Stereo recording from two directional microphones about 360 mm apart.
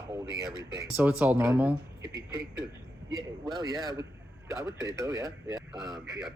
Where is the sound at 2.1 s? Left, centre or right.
Centre.